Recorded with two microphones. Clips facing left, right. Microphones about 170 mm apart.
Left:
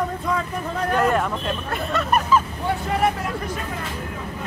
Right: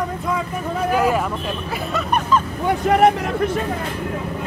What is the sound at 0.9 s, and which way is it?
Speech, 5° right (ahead or behind).